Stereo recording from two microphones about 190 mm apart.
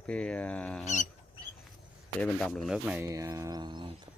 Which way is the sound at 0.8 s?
40° left (ahead or behind).